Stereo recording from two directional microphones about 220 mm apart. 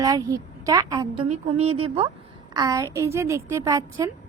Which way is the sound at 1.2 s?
30° right (ahead or behind).